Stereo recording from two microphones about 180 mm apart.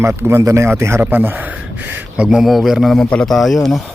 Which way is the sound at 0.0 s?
15° right (ahead or behind).